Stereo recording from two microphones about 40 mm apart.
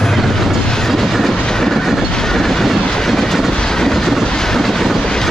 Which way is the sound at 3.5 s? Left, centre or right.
Centre.